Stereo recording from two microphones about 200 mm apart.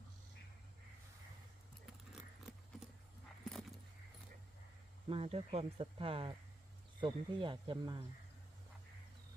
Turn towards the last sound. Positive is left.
turn(degrees=-20)  # may be behind; listen again after turning